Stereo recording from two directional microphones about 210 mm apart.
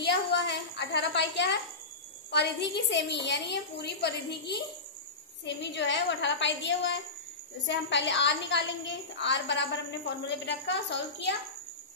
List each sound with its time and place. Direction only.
0.0 s a woman's voice: 55° left (ahead or behind)